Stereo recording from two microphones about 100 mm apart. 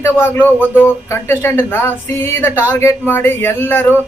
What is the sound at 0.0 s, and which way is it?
A man's voice, 20° left (ahead or behind).